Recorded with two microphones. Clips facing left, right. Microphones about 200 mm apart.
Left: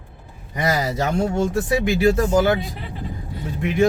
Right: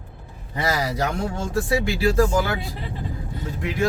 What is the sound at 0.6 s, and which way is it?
Speech, 20° left (ahead or behind).